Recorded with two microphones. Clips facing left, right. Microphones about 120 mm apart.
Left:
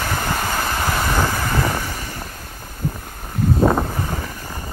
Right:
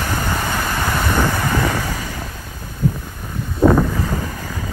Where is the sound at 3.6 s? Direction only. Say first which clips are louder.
Right 6 dB; 25° left (ahead or behind).